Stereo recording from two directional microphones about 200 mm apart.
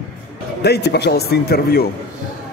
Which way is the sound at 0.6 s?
55° left (ahead or behind).